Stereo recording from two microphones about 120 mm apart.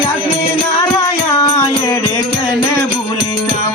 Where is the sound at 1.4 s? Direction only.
35° left (ahead or behind).